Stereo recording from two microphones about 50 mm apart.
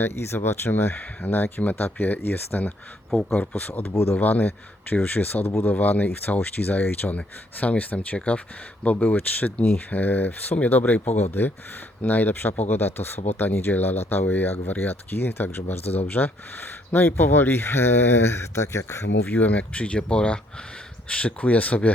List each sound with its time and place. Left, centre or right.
0.0 s speech: left
0.3 s speech: left
4.2 s speech: left
7.2 s speech: left
18.5 s speech: left
19.3 s speech: left